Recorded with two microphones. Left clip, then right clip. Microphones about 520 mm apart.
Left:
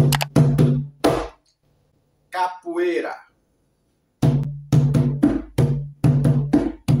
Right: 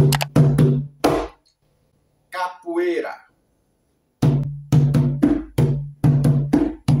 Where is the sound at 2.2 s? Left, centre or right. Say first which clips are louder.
Left 2 dB; right.